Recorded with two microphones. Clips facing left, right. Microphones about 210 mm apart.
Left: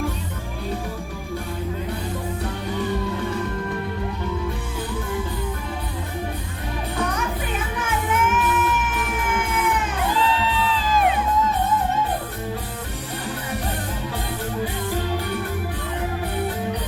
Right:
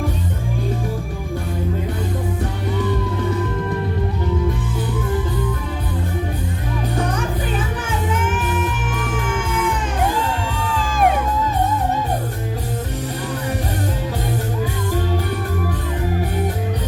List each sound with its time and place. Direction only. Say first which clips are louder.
7.9 s music: left 2 dB; 30° right (ahead or behind)
10.0 s music: right 2 dB; 45° right (ahead or behind)